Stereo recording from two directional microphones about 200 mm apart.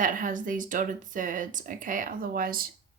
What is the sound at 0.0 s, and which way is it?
A woman's voice, 40° right (ahead or behind).